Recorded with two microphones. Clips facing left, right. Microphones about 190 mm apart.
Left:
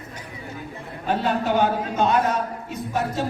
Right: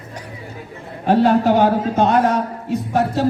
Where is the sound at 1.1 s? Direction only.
65° right (ahead or behind).